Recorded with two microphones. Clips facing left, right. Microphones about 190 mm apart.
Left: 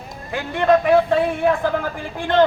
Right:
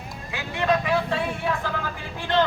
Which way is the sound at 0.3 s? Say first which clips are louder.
Left 7 dB; 55° left (ahead or behind).